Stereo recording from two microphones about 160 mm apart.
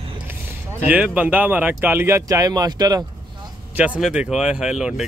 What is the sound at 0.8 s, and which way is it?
Speech, 10° right (ahead or behind).